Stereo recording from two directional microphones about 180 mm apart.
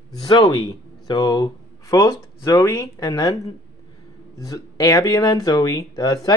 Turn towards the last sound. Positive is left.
turn(degrees=20)  # may be behind; listen again after turning